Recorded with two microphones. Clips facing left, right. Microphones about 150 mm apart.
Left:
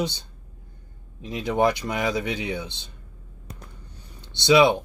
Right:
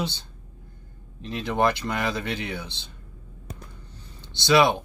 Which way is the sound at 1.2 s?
15° left (ahead or behind).